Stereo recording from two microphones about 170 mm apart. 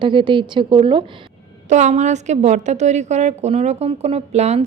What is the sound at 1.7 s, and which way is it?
A woman's voice, 45° right (ahead or behind).